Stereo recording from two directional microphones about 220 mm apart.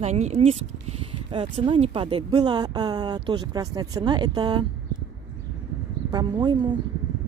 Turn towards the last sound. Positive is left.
turn(degrees=-20)  # may be behind; listen again after turning